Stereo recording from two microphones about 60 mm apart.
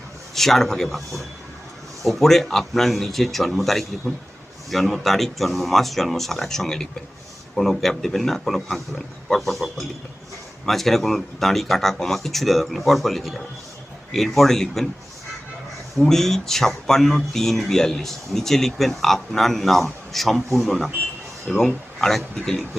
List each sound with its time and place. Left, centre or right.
0.3 s speech: centre
16.0 s speech: centre